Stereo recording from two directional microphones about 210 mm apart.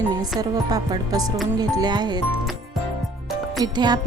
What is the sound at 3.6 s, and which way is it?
Speech, 20° right (ahead or behind).